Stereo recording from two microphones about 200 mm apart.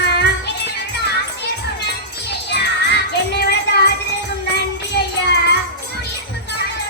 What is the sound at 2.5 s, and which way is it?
Music, 55° left (ahead or behind).